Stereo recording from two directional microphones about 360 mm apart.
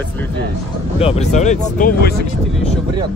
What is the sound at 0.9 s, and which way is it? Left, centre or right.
A man's voice, centre.